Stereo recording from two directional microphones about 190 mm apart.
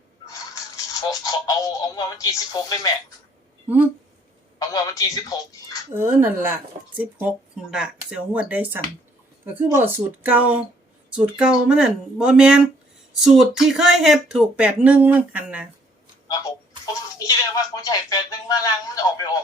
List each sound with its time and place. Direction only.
1.2 s speech: 20° left (ahead or behind)
4.6 s speech: 20° left (ahead or behind)
5.9 s speech: 10° right (ahead or behind)
16.3 s speech: 20° left (ahead or behind)